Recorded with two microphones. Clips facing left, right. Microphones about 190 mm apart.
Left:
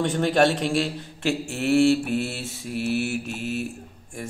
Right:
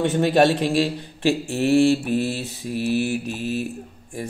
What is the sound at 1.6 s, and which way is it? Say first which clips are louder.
Mantra: right 2 dB; 20° right (ahead or behind).